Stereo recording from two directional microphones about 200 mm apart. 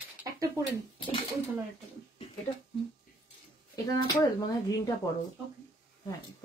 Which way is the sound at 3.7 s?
15° left (ahead or behind).